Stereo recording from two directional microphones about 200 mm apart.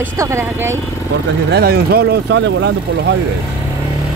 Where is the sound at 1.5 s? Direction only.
50° right (ahead or behind).